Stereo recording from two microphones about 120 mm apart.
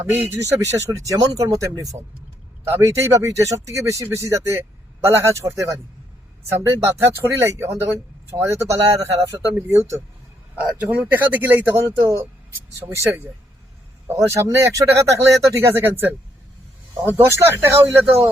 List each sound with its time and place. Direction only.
0.0 s speech: 20° right (ahead or behind)
11.0 s speech: 15° right (ahead or behind)
17.2 s speech: 20° right (ahead or behind)